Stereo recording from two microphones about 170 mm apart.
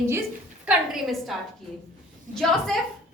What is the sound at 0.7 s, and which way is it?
A woman's voice, centre (ahead or behind).